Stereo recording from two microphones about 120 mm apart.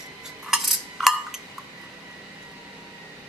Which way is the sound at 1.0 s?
5° right (ahead or behind).